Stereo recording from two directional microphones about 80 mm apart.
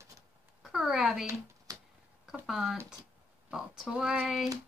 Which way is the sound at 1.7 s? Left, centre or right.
Right.